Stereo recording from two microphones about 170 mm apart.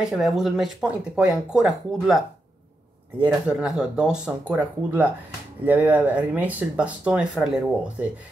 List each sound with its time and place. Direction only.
0.0 s speech: centre (ahead or behind)
3.3 s speech: centre (ahead or behind)